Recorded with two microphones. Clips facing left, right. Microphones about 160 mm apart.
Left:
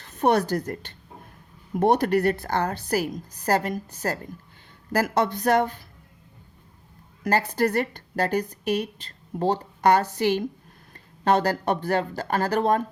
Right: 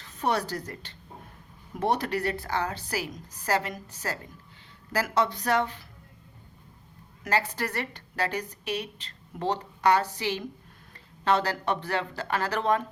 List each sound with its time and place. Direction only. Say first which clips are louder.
0.0 s a woman's voice: left 7 dB; 50° left (ahead or behind)
7.3 s a woman's voice: left 6 dB; 45° left (ahead or behind)